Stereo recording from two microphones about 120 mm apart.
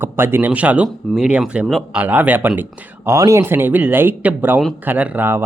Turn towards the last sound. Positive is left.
turn(degrees=-15)  # may be behind; listen again after turning